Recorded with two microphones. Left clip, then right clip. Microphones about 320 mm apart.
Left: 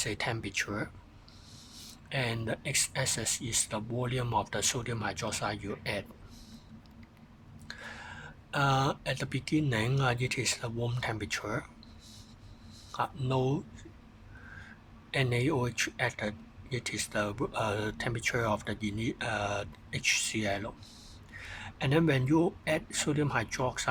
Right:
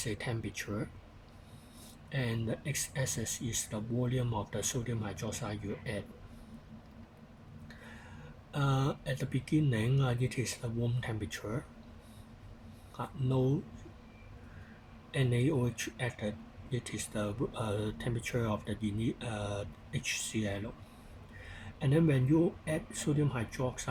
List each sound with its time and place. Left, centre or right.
0.0 s a man's voice: left
2.0 s a man's voice: left
8.4 s a man's voice: left
13.2 s speech: left
15.1 s a man's voice: left
21.8 s a man's voice: left